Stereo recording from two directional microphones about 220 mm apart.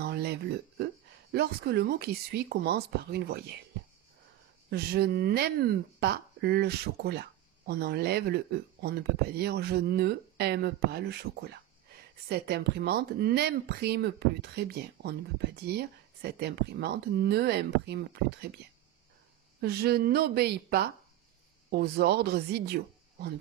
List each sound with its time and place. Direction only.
0.0 s a sound: 45° right (ahead or behind)
1.3 s speech: 45° right (ahead or behind)
4.6 s speech: 45° right (ahead or behind)
12.3 s speech: 45° right (ahead or behind)
19.6 s speech: 45° right (ahead or behind)